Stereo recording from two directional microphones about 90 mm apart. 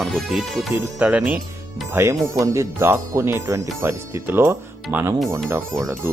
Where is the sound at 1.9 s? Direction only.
30° right (ahead or behind).